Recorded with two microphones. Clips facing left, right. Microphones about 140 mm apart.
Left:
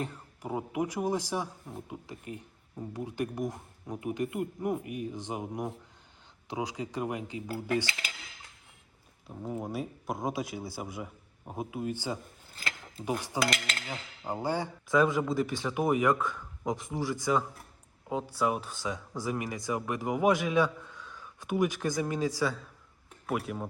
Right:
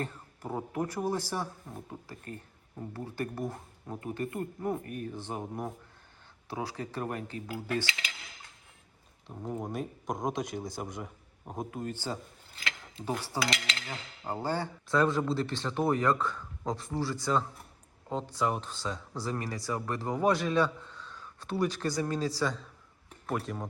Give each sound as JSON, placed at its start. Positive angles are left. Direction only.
{"t": 0.0, "sound": "speech", "side_deg": 10}
{"t": 7.9, "sound": "cutlery", "side_deg": 40}
{"t": 9.3, "sound": "speech", "side_deg": 0}
{"t": 13.4, "sound": "cutlery", "side_deg": 50}
{"t": 13.8, "sound": "a man's voice", "side_deg": 10}
{"t": 22.4, "sound": "speech", "side_deg": 5}
{"t": 23.0, "sound": "a sound", "side_deg": 5}